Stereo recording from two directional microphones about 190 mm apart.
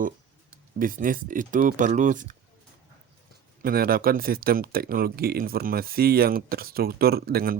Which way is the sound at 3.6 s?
50° right (ahead or behind).